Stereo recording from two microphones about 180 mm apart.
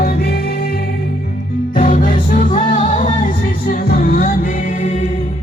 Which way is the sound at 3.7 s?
55° left (ahead or behind).